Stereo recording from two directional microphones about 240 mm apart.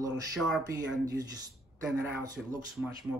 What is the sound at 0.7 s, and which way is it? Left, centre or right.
Speech, centre.